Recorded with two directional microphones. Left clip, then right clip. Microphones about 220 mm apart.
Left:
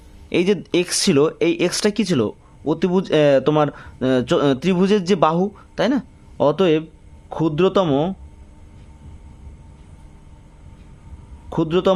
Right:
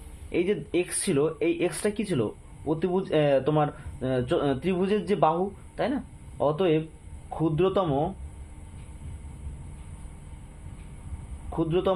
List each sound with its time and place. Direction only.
0.3 s speech: 45° left (ahead or behind)
11.5 s speech: 50° left (ahead or behind)